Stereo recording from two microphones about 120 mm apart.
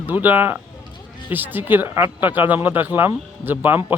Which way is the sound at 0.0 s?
15° right (ahead or behind).